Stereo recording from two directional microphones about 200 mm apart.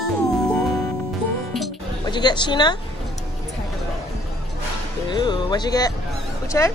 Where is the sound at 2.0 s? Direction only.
20° left (ahead or behind).